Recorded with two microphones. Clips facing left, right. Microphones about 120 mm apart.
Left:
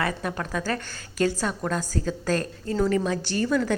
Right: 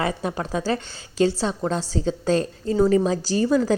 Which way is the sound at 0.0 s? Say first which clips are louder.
Right 3 dB; 25° right (ahead or behind).